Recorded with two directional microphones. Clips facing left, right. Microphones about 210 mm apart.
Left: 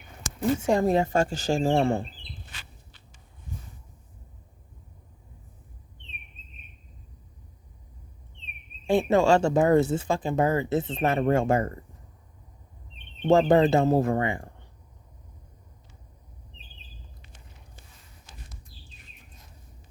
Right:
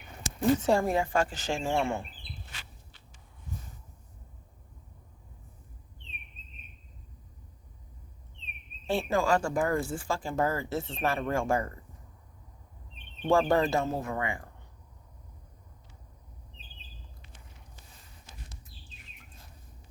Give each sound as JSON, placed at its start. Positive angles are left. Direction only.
{"t": 0.3, "sound": "speech", "side_deg": 15}
{"t": 0.9, "sound": "speech", "side_deg": 35}
{"t": 8.9, "sound": "speech", "side_deg": 20}
{"t": 13.2, "sound": "speech", "side_deg": 20}
{"t": 13.8, "sound": "speech", "side_deg": 35}